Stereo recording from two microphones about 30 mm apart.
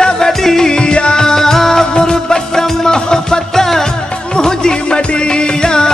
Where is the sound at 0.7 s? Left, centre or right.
Left.